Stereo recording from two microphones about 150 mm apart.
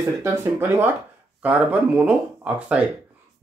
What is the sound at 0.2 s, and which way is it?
Speech, 15° right (ahead or behind).